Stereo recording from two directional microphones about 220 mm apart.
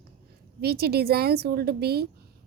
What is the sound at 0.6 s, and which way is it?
A woman's voice, 45° right (ahead or behind).